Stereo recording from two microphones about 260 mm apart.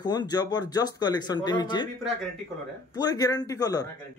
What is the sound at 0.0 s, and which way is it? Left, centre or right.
A man's voice, centre.